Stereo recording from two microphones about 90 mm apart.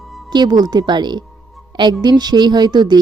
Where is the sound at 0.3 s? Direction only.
50° right (ahead or behind).